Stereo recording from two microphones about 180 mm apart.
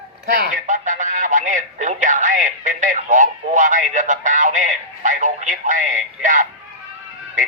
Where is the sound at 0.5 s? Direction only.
45° right (ahead or behind).